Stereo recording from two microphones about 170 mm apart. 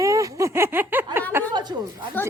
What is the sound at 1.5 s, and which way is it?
Speech, 25° right (ahead or behind).